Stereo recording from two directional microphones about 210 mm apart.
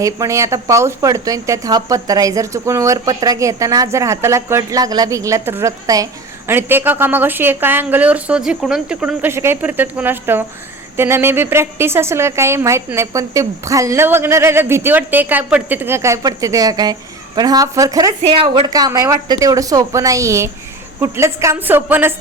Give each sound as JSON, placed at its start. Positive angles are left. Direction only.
{"t": 0.0, "sound": "a woman's voice", "side_deg": -15}
{"t": 18.7, "sound": "a woman's voice", "side_deg": -15}